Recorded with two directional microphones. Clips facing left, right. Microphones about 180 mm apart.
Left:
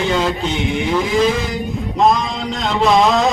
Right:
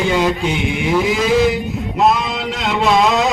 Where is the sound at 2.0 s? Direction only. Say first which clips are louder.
Even; 5° right (ahead or behind).